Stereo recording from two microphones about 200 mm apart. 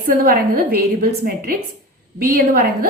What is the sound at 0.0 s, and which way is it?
A woman's voice, 45° right (ahead or behind).